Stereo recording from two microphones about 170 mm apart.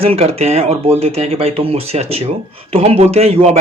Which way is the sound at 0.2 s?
35° right (ahead or behind).